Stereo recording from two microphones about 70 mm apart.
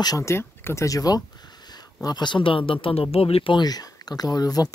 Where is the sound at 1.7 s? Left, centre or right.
Left.